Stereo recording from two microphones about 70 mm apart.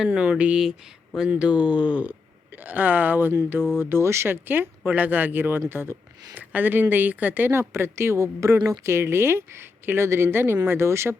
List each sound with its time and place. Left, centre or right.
0.0 s speech: centre; by 11.2 s right